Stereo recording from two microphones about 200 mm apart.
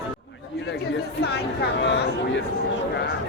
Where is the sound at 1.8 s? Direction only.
55° left (ahead or behind).